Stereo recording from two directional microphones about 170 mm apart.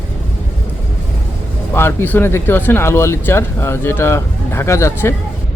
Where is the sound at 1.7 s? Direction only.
15° left (ahead or behind).